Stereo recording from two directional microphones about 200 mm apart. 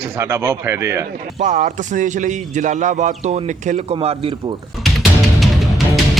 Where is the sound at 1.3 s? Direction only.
40° right (ahead or behind).